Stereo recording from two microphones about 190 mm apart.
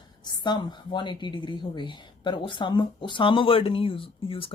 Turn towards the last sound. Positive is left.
turn(degrees=30)  # may be behind; listen again after turning